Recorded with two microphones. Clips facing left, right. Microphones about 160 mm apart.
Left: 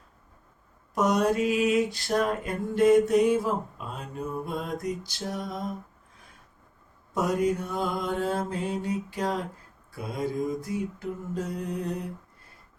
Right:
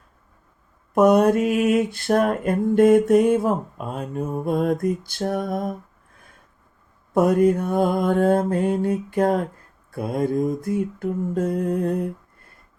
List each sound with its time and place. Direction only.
0.9 s mantra: 55° right (ahead or behind)
7.1 s mantra: 55° right (ahead or behind)